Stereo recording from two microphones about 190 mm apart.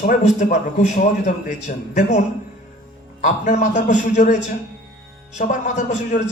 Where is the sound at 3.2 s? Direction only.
40° left (ahead or behind).